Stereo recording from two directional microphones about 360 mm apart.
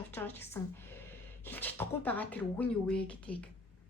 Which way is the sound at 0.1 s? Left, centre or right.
Centre.